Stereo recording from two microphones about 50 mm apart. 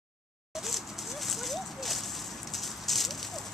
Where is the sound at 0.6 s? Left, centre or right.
Centre.